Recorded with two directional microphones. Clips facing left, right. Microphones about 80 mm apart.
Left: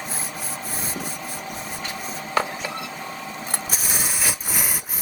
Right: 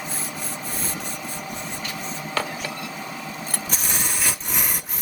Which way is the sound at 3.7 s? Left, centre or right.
Centre.